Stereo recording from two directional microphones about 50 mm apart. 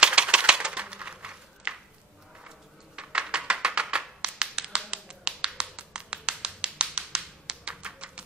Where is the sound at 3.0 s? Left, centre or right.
Centre.